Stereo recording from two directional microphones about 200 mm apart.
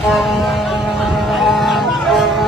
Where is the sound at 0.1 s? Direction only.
Centre (ahead or behind).